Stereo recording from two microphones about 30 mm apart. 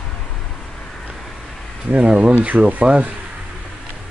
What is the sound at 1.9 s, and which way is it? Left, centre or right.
Speech, right.